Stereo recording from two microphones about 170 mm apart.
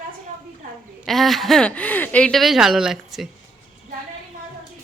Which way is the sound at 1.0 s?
Centre (ahead or behind).